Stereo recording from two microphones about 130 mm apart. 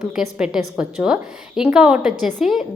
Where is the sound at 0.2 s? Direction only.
5° right (ahead or behind).